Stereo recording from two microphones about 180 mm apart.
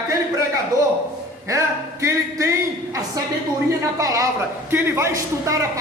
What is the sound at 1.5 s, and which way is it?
A man's voice, 15° right (ahead or behind).